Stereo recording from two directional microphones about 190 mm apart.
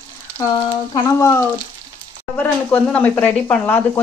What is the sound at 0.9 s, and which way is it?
Speech, 20° left (ahead or behind).